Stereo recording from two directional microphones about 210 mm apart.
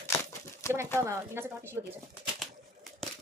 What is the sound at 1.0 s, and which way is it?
Speech, 10° right (ahead or behind).